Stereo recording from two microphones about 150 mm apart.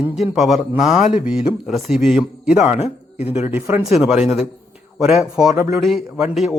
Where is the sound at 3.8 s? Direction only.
Centre (ahead or behind).